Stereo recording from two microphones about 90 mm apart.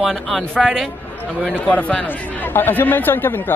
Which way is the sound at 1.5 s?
15° left (ahead or behind).